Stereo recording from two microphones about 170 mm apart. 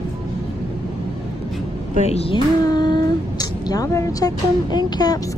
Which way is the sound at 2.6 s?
25° left (ahead or behind).